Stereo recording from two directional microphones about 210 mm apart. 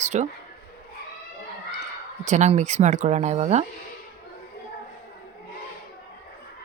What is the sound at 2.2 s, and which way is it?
Speech, 35° right (ahead or behind).